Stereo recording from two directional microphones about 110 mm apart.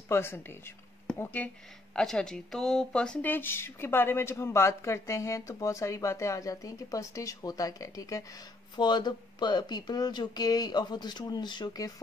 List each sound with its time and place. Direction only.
0.1 s speech: 20° left (ahead or behind)
2.0 s speech: 5° left (ahead or behind); by 11.9 s 40° left (ahead or behind)